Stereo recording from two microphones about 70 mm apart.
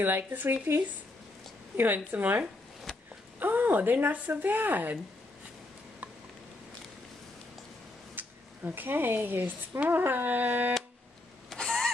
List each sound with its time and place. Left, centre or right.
0.0 s speech: right
2.0 s speech: right
8.2 s speech: right
11.5 s goose: centre